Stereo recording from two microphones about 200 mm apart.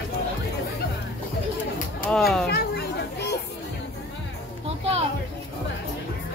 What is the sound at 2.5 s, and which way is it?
Children playing, 55° left (ahead or behind).